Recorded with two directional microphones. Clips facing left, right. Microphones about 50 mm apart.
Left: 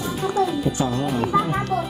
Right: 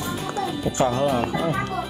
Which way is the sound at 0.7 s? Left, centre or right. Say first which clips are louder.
Right 2 dB; right.